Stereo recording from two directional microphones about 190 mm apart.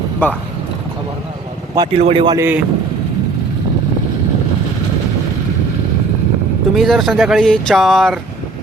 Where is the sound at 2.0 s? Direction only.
30° right (ahead or behind).